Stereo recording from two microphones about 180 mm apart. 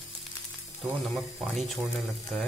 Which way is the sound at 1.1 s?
Centre (ahead or behind).